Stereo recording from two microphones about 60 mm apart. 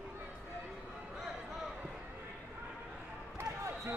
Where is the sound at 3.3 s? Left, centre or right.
Right.